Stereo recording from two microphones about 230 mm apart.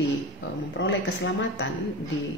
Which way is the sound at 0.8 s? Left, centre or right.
Left.